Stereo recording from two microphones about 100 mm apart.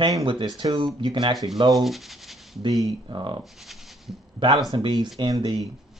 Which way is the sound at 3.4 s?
Centre (ahead or behind).